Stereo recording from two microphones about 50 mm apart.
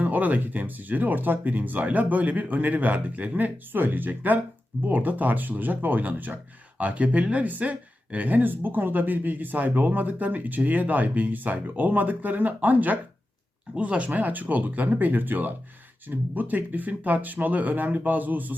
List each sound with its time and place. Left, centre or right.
0.0 s speech: right